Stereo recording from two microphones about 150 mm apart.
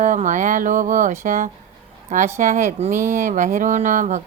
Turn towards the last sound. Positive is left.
turn(degrees=-55)  # may be behind; listen again after turning